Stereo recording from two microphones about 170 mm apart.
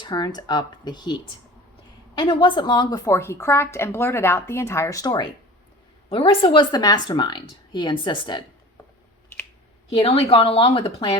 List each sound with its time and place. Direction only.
0.0 s a woman's voice: 25° left (ahead or behind)
10.0 s speech: 35° left (ahead or behind)